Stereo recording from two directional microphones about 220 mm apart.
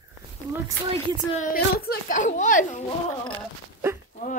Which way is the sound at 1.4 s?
40° left (ahead or behind).